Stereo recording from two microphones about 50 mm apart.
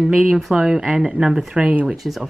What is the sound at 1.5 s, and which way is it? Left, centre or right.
Speech, right.